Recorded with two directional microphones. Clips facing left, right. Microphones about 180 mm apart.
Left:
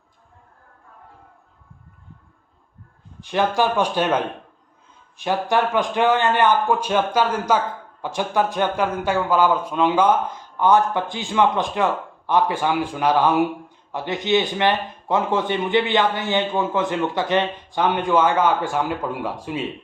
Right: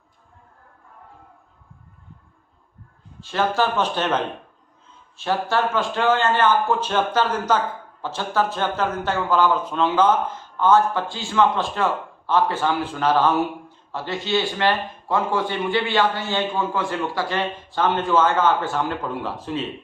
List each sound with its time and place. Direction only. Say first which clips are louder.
3.2 s a man's voice: left 2 dB; 15° left (ahead or behind)